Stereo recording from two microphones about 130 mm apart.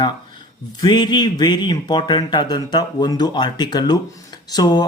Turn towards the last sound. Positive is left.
turn(degrees=30)  # may be behind; listen again after turning